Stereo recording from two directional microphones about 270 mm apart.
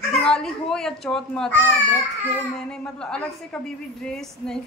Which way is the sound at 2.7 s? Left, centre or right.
Centre.